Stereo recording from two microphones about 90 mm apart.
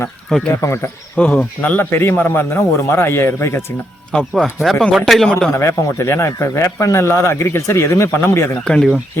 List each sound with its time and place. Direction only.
0.6 s a man's voice: 30° left (ahead or behind)
1.1 s a man's voice: 15° left (ahead or behind)
4.2 s speech: 10° right (ahead or behind)
4.7 s a man's voice: 5° left (ahead or behind)
5.5 s a man's voice: 30° left (ahead or behind)
8.6 s speech: 10° left (ahead or behind)